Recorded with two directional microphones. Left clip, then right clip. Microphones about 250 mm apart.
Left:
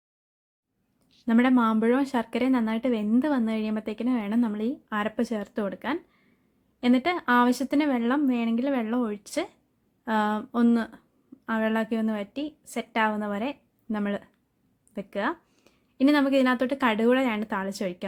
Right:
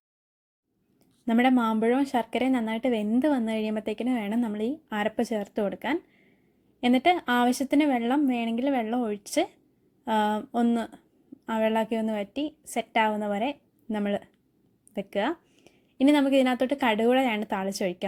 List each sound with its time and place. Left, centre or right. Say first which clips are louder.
1.2 s speech: left 1 dB; centre